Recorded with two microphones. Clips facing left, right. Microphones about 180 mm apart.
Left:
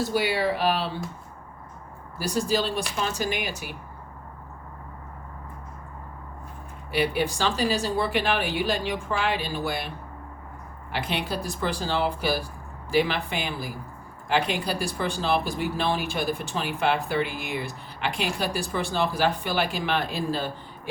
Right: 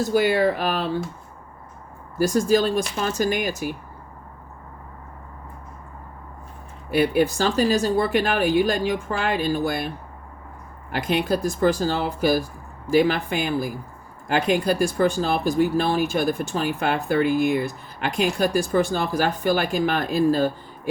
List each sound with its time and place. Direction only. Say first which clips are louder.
0.1 s speech: right 6 dB; 45° right (ahead or behind)
2.1 s speech: right 7 dB; 45° right (ahead or behind)
6.9 s speech: right 6 dB; 45° right (ahead or behind)
10.9 s speech: right 7 dB; 45° right (ahead or behind)